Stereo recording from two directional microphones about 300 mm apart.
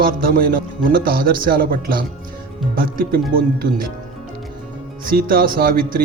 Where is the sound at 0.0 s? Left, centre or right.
Right.